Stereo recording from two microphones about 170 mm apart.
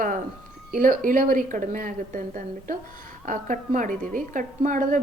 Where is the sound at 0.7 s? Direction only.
55° right (ahead or behind).